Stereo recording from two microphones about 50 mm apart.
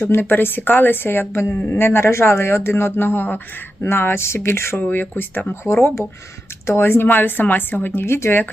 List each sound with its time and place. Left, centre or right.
0.0 s speech: left
3.8 s speech: left
4.8 s speech: left
5.7 s speech: left
6.7 s speech: left
8.0 s speech: left